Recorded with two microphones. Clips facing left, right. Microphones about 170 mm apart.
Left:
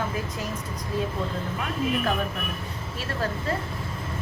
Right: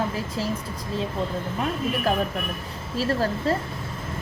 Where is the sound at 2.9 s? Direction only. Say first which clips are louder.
Right 7 dB; 35° right (ahead or behind).